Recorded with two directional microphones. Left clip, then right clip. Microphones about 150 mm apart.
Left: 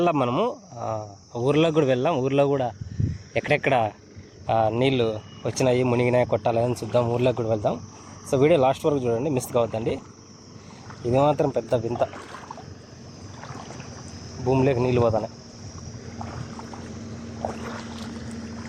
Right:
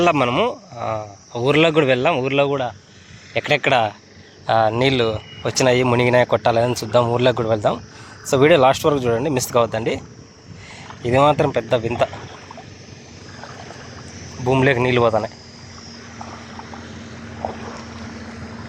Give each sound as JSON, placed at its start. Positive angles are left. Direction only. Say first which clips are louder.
{"t": 0.0, "sound": "speech", "louder": "right 6 dB", "side_deg": 10}
{"t": 3.3, "sound": "speech", "louder": "right 5 dB", "side_deg": 25}
{"t": 11.0, "sound": "speech", "louder": "right 5 dB", "side_deg": 10}
{"t": 14.5, "sound": "speech", "louder": "right 5 dB", "side_deg": 5}